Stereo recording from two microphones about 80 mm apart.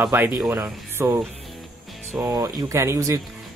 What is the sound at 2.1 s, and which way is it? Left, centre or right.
Speech, right.